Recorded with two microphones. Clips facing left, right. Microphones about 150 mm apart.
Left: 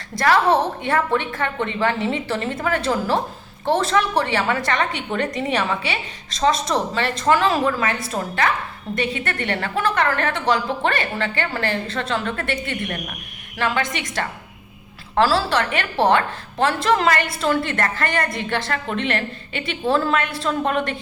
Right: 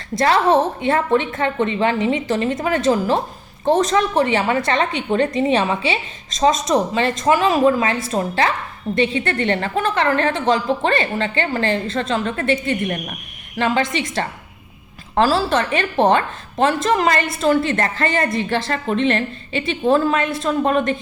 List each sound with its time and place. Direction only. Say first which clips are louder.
0.2 s a woman's voice: right 2 dB; 20° right (ahead or behind)
13.6 s a woman's voice: right 4 dB; 25° right (ahead or behind)